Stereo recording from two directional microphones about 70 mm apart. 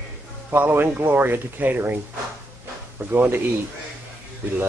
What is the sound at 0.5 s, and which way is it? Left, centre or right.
Speech, right.